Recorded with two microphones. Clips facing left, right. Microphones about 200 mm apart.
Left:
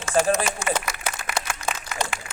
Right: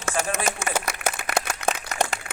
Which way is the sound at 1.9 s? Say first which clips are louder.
Right 1 dB; 40° right (ahead or behind).